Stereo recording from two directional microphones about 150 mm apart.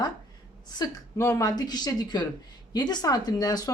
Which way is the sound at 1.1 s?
15° left (ahead or behind).